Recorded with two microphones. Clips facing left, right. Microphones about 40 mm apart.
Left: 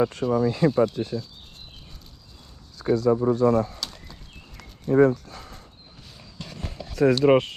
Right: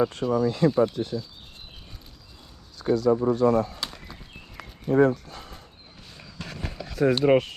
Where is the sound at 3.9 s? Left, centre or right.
Centre.